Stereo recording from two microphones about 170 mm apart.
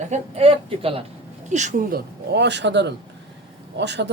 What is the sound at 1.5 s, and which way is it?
Speech, 45° right (ahead or behind).